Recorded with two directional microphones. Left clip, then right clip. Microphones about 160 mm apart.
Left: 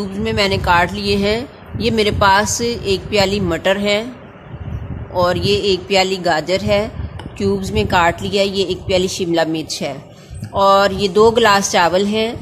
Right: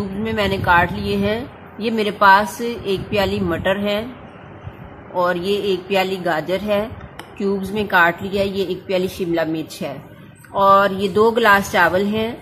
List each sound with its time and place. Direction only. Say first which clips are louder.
0.2 s a woman's voice: left 4 dB; 20° left (ahead or behind)
5.1 s a woman's voice: left 3 dB; 15° left (ahead or behind)